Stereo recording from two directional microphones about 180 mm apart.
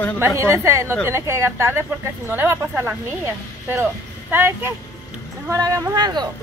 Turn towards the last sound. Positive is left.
turn(degrees=-25)  # may be behind; listen again after turning